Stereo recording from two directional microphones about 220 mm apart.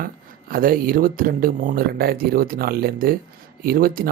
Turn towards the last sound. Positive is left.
turn(degrees=-40)  # may be behind; listen again after turning